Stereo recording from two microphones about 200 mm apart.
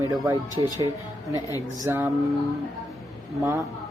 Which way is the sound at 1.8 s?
10° right (ahead or behind).